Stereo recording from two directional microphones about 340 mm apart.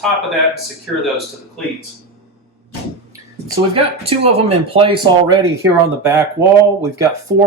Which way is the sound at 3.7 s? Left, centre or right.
Centre.